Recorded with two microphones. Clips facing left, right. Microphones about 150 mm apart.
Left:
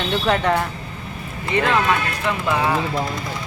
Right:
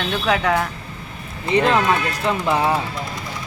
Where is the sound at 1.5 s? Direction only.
30° right (ahead or behind).